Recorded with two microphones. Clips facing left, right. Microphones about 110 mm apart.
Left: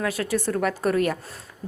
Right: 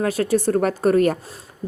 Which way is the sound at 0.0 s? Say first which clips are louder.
Right 6 dB; 35° right (ahead or behind).